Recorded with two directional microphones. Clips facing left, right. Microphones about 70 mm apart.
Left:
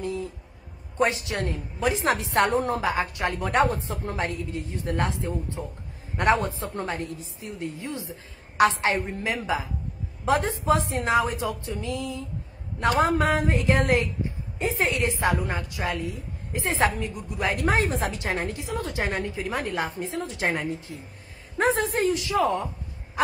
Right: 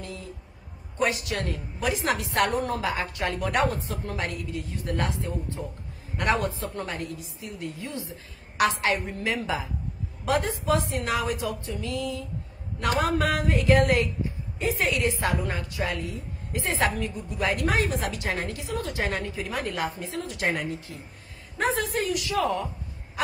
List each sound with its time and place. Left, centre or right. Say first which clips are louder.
0.0 s a woman's voice: left 8 dB; left